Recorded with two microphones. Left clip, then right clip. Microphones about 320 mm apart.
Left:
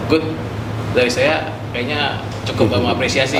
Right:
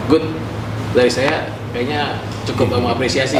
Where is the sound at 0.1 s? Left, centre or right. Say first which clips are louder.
Right 2 dB; left.